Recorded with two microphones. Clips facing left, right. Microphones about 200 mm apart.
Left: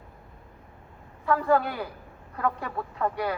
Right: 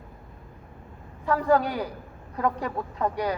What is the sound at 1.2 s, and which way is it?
A man's voice, 15° right (ahead or behind).